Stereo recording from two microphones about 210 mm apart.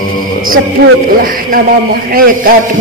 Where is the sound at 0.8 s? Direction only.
45° right (ahead or behind).